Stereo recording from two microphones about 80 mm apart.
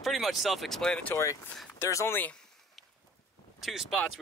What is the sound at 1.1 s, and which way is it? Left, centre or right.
Speech, left.